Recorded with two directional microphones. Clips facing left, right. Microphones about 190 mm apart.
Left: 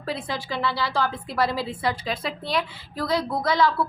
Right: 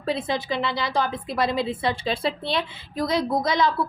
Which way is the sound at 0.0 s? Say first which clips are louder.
Right 4 dB; 20° right (ahead or behind).